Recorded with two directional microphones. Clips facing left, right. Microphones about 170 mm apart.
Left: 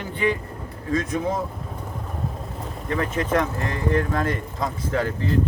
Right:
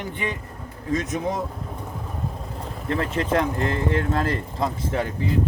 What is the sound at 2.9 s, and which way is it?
Speech, 30° right (ahead or behind).